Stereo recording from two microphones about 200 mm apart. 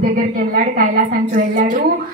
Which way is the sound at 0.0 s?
45° right (ahead or behind).